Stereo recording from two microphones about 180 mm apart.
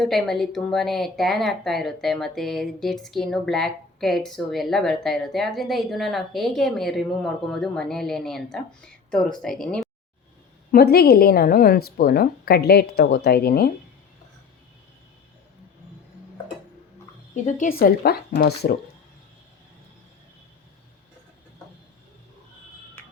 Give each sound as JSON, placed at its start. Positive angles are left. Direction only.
{"t": 0.0, "sound": "speech", "side_deg": 0}
{"t": 10.7, "sound": "a woman's voice", "side_deg": 60}
{"t": 17.3, "sound": "a woman's voice", "side_deg": 45}